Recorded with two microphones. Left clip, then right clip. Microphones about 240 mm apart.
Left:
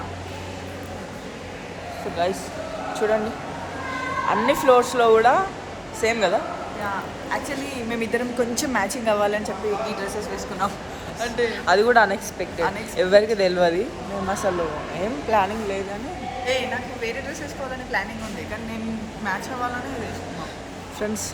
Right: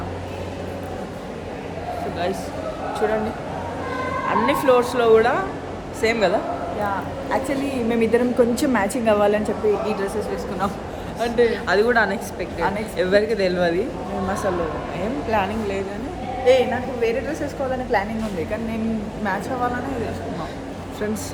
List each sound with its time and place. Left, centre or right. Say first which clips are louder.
3.0 s a woman's voice: left 1 dB; centre
4.3 s a woman's voice: even; centre
7.9 s a woman's voice: right 6 dB; centre
11.2 s a woman's voice: right 6 dB; centre
11.5 s a woman's voice: left 1 dB; centre
14.9 s a woman's voice: left 2 dB; centre
16.5 s a woman's voice: right 8 dB; right